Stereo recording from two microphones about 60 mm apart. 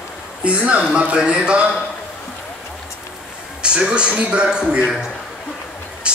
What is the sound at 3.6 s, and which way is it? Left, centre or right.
A man's voice, centre.